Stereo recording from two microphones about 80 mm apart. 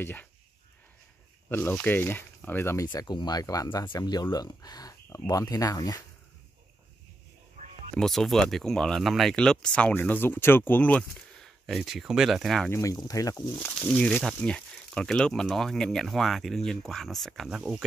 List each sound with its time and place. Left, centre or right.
0.0 s speech: left
1.5 s speech: centre
2.9 s speech: left
3.6 s speech: left
7.9 s speech: centre
9.9 s speech: left
11.4 s speech: centre
12.8 s speech: left
13.5 s speech: left; by 17.6 s centre
17.6 s speech: centre